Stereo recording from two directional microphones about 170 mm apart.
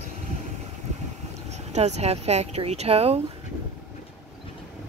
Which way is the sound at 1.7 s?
40° right (ahead or behind).